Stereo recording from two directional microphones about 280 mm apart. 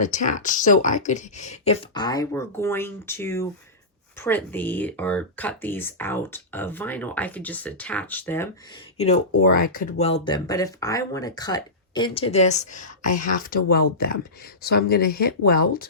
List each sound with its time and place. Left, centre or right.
0.0 s speech: left; by 8.4 s centre
9.3 s speech: left